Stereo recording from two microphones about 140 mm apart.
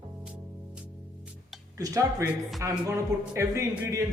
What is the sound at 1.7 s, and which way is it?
A man's voice, 25° right (ahead or behind).